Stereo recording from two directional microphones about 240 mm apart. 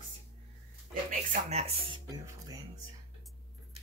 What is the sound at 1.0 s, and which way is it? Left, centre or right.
Speech, right.